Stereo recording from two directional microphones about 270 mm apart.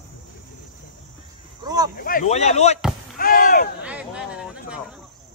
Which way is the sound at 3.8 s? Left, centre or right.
Centre.